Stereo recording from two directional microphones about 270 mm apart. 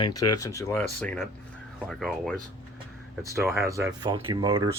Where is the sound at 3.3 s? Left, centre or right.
Centre.